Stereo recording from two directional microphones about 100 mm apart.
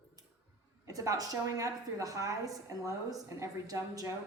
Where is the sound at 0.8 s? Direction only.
35° right (ahead or behind).